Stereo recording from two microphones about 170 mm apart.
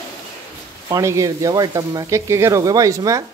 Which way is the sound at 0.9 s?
15° right (ahead or behind).